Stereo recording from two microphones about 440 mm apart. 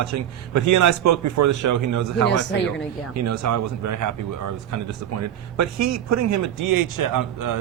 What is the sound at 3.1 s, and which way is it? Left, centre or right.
Speech, right.